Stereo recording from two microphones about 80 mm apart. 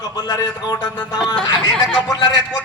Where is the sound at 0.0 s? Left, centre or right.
Left.